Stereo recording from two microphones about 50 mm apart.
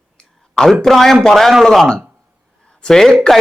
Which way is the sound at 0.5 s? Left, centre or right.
Centre.